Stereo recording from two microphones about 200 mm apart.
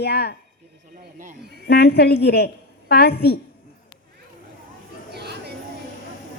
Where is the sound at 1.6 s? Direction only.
55° left (ahead or behind).